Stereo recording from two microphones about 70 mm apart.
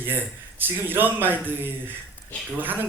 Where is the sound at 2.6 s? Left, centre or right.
Right.